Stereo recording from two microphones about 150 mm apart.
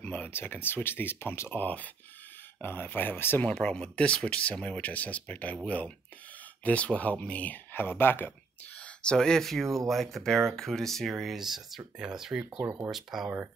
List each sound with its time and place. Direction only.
0.0 s speech: 10° left (ahead or behind)
12.6 s speech: 15° right (ahead or behind)
12.9 s speech: centre (ahead or behind)